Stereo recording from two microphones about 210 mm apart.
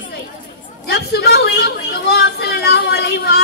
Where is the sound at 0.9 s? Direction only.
50° left (ahead or behind).